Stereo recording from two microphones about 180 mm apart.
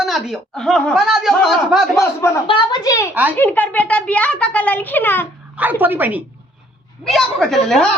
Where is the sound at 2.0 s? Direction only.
15° left (ahead or behind).